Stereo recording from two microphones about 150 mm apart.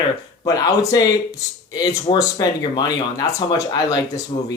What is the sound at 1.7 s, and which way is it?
Speech, 25° left (ahead or behind).